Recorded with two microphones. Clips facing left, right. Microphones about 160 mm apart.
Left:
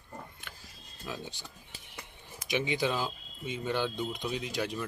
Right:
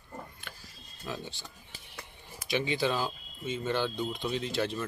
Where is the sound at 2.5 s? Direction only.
15° left (ahead or behind).